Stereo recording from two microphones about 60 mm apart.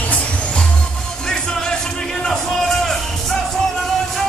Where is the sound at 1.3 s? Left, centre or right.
Centre.